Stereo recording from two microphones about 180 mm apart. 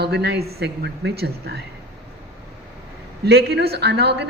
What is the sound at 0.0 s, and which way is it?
A woman's voice, 65° right (ahead or behind).